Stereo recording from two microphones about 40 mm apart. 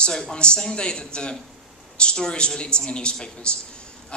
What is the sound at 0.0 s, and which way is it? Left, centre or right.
A man's voice, left.